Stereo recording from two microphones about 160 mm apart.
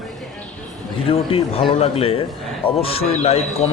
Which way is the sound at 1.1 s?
35° left (ahead or behind).